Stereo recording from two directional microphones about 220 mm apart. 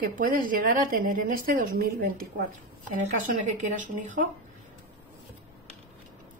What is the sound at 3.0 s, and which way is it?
A woman's voice, 35° right (ahead or behind).